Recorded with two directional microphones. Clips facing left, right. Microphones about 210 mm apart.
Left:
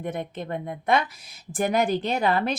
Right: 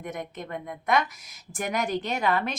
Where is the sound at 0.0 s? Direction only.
30° left (ahead or behind).